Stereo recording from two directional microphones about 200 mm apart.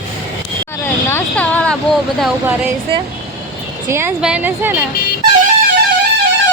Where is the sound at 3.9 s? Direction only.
10° right (ahead or behind).